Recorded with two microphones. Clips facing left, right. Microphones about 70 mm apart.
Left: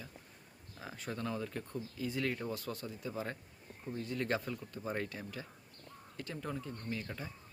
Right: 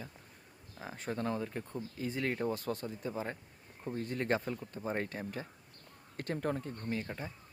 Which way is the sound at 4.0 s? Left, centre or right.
Right.